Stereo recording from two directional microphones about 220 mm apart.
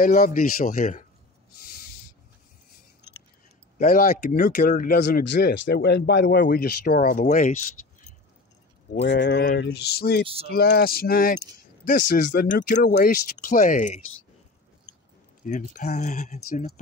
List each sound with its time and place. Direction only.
0.0 s speech: 40° left (ahead or behind)
3.7 s speech: 40° left (ahead or behind)
9.0 s a sound: 55° left (ahead or behind)
10.2 s speech: 25° right (ahead or behind)
10.5 s a sound: 45° left (ahead or behind)
11.5 s speech: 35° left (ahead or behind)
15.4 s speech: 35° left (ahead or behind)